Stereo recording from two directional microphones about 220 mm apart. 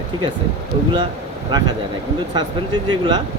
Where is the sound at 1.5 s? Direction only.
20° right (ahead or behind).